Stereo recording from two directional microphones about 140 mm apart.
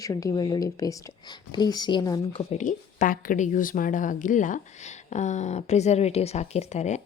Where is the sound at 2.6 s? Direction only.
65° left (ahead or behind).